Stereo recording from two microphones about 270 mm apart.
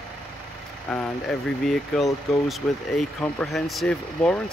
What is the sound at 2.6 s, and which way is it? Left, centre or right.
Speech, centre.